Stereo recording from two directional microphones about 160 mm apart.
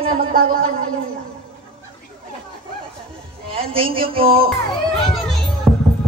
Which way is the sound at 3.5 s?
35° right (ahead or behind).